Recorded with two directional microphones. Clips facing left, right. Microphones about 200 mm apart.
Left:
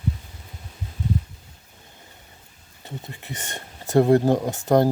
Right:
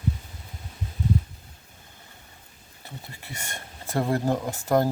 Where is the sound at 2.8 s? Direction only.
20° left (ahead or behind).